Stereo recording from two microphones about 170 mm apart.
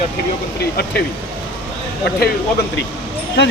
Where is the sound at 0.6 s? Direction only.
70° left (ahead or behind).